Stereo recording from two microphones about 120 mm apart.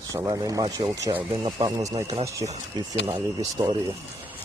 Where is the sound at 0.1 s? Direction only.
30° right (ahead or behind).